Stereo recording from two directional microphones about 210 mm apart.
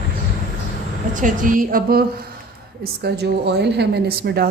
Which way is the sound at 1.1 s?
40° right (ahead or behind).